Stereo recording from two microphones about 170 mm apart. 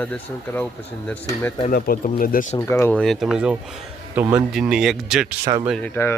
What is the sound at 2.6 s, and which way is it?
Speech, 15° left (ahead or behind).